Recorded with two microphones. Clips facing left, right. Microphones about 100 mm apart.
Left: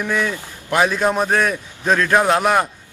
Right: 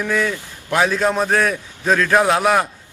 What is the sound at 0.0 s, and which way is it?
A man's voice, 5° left (ahead or behind).